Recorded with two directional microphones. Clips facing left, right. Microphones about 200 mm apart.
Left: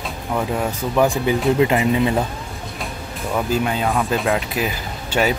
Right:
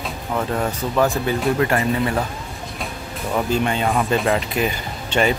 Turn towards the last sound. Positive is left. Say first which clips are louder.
# even
turn(degrees=5)  # may be behind; listen again after turning